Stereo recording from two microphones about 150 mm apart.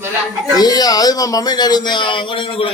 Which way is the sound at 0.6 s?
25° left (ahead or behind).